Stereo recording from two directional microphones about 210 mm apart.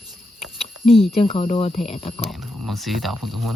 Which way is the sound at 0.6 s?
30° left (ahead or behind).